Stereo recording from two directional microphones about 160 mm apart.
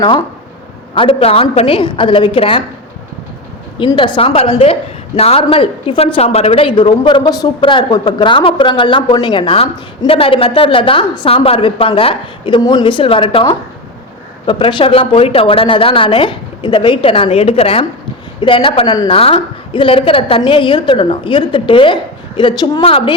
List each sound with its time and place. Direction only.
0.9 s a woman's voice: 35° left (ahead or behind)
3.8 s a woman's voice: 30° left (ahead or behind)